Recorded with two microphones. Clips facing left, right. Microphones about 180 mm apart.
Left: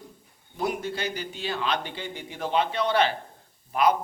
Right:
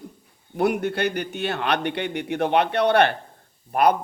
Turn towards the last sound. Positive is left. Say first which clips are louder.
# right 3 dB
turn(degrees=-60)  # may be behind; listen again after turning